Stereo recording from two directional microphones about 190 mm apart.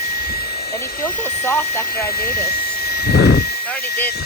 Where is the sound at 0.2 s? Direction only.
55° left (ahead or behind).